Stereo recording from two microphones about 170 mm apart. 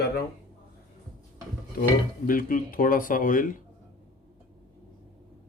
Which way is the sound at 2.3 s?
55° left (ahead or behind).